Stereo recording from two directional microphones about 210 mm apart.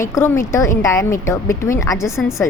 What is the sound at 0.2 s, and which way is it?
A woman's voice, 15° left (ahead or behind).